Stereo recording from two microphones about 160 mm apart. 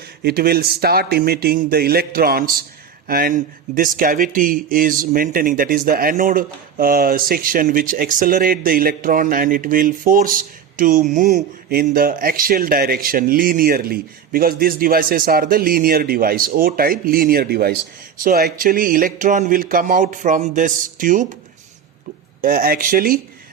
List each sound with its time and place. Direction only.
0.2 s speech: 80° right; by 11.4 s 50° right (ahead or behind)
11.7 s speech: 65° right (ahead or behind)
22.4 s speech: 65° right (ahead or behind)